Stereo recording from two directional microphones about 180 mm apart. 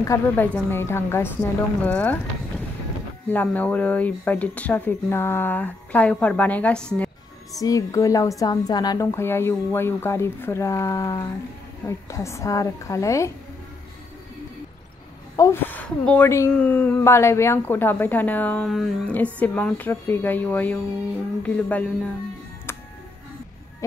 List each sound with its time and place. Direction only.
0.0 s a woman's voice: 15° left (ahead or behind)
3.3 s a woman's voice: 10° left (ahead or behind)
15.3 s a woman's voice: 15° left (ahead or behind)